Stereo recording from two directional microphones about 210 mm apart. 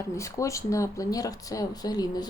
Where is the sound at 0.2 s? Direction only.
15° left (ahead or behind).